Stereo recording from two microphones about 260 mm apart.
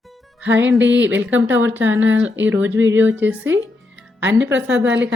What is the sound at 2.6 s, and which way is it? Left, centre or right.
Speech, right.